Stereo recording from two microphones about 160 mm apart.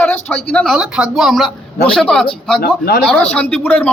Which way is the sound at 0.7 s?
5° right (ahead or behind).